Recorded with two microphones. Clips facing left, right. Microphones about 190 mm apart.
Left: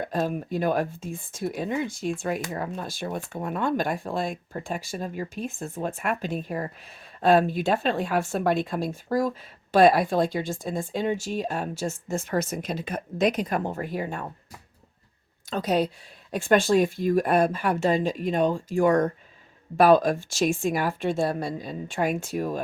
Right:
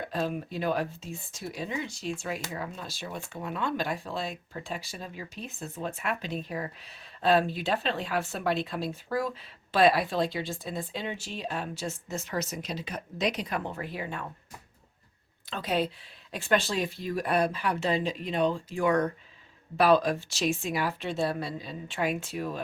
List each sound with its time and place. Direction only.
0.0 s speech: 45° left (ahead or behind)
15.4 s speech: 40° left (ahead or behind)